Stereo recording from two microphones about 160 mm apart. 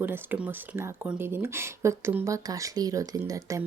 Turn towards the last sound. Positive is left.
turn(degrees=-20)  # may be behind; listen again after turning